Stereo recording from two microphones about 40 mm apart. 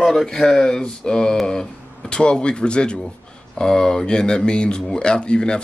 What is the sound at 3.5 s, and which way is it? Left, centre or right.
Speech, centre.